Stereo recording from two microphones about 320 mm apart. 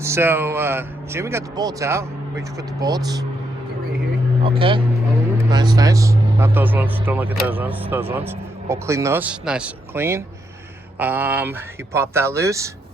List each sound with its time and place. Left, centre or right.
0.0 s speech: centre
4.4 s speech: centre